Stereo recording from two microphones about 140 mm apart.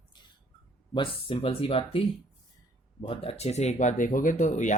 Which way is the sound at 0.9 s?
40° left (ahead or behind).